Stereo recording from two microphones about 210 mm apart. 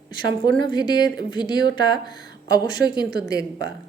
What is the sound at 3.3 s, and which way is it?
Speech, 50° right (ahead or behind).